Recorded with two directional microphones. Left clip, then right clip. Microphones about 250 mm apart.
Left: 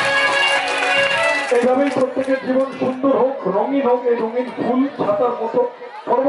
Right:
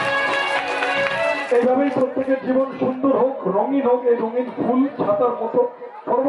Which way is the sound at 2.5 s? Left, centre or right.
Centre.